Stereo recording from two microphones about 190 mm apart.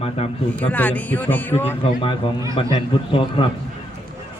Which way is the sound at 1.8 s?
25° left (ahead or behind).